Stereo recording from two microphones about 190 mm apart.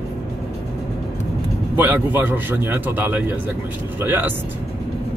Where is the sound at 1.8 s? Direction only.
10° right (ahead or behind).